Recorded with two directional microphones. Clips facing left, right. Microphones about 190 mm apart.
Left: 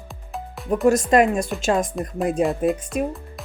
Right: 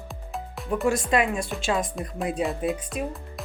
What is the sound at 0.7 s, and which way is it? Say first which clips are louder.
Speech: left 6 dB; 40° left (ahead or behind).